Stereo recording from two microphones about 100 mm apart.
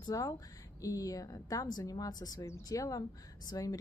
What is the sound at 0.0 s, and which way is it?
A woman's voice, 35° left (ahead or behind).